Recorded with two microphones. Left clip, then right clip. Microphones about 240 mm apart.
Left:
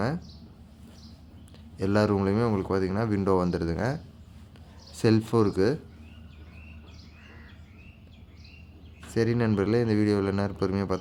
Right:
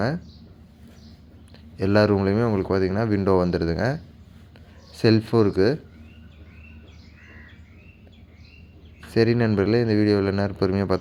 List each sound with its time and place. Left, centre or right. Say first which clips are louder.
1.7 s speech: right 6 dB; centre
9.0 s speech: right 6 dB; centre